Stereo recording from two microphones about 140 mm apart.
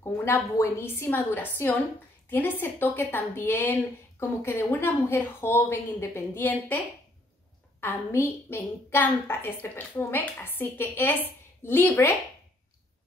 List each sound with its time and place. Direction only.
0.0 s a woman's voice: 20° left (ahead or behind)
7.8 s a woman's voice: 15° left (ahead or behind)